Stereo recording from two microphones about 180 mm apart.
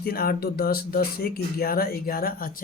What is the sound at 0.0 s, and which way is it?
Speech, 55° left (ahead or behind).